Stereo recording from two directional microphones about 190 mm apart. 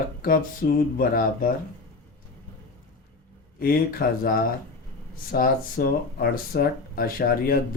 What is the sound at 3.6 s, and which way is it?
Speech, 50° left (ahead or behind).